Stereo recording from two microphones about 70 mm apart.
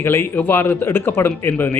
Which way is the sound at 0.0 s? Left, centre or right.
Left.